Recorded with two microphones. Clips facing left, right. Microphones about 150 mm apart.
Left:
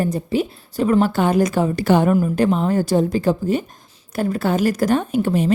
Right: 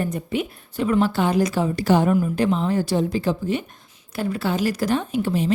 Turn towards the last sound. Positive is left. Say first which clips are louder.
# left 4 dB
turn(degrees=50)  # may be behind; listen again after turning